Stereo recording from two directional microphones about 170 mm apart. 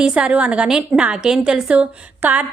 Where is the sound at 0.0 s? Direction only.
5° right (ahead or behind).